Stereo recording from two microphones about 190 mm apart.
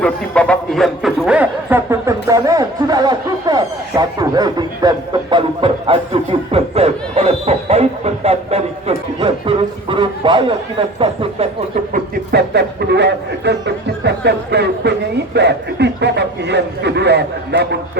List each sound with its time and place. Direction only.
0.0 s a man's voice: 5° left (ahead or behind); by 6.0 s 25° right (ahead or behind)
6.5 s a sound: 30° right (ahead or behind)
11.9 s a man's voice: 60° right (ahead or behind)